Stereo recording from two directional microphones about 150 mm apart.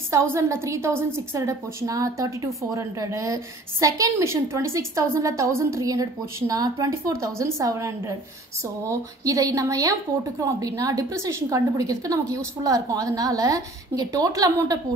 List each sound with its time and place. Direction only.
0.1 s a woman's voice: 20° right (ahead or behind)